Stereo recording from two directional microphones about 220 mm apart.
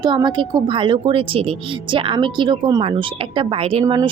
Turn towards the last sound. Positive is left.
turn(degrees=-20)  # may be behind; listen again after turning